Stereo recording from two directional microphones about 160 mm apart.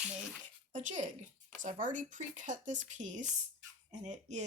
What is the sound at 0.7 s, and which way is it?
Speech, 50° right (ahead or behind).